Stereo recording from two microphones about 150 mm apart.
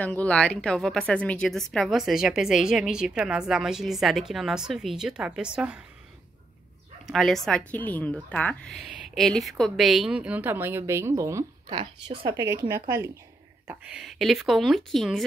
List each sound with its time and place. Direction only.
0.0 s a woman's voice: 10° left (ahead or behind); by 5.8 s 5° right (ahead or behind)
7.1 s a woman's voice: centre (ahead or behind); by 11.4 s 20° right (ahead or behind)
11.7 s a woman's voice: 35° right (ahead or behind)
12.4 s speech: 20° right (ahead or behind)
13.7 s a woman's voice: 5° right (ahead or behind)